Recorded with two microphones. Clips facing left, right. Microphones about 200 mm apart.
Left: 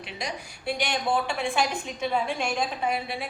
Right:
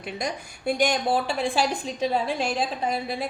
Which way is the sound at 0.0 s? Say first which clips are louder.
Right 4 dB; 45° right (ahead or behind).